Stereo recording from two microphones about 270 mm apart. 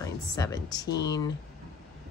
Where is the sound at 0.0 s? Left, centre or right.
Centre.